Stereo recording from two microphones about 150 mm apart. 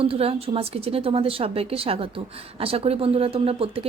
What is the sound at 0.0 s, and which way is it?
A woman's voice, 40° right (ahead or behind).